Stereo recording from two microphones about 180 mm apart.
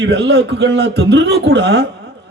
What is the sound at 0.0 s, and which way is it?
A man's voice, 70° right (ahead or behind).